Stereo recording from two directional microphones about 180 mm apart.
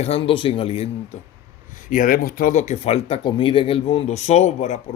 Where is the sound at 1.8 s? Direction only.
45° left (ahead or behind).